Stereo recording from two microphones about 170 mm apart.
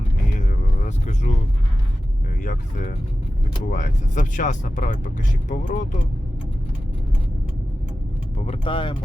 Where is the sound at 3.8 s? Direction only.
50° left (ahead or behind).